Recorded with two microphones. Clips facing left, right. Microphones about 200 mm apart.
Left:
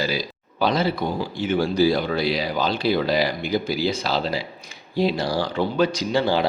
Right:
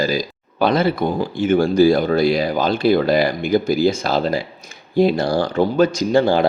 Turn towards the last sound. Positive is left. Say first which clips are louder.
# right 6 dB
turn(degrees=-50)  # may be behind; listen again after turning